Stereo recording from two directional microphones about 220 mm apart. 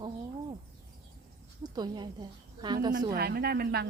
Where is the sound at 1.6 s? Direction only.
20° right (ahead or behind).